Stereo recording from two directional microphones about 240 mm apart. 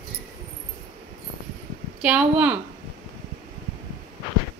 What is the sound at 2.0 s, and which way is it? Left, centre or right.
Speech, centre.